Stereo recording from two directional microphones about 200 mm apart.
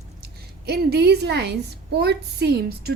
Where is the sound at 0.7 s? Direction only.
55° right (ahead or behind).